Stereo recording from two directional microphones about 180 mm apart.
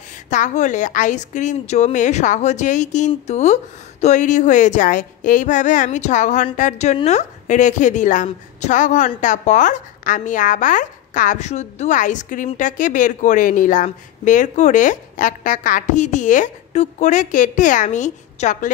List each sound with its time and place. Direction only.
0.3 s a woman's voice: 45° left (ahead or behind)